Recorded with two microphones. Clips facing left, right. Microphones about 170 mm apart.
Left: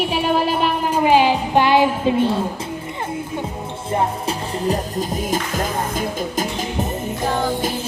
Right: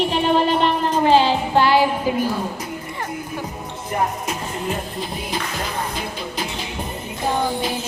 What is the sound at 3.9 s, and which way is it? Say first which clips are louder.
Music: left 2 dB; 35° left (ahead or behind).